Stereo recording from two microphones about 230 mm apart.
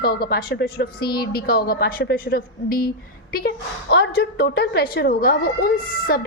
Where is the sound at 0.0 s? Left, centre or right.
Left.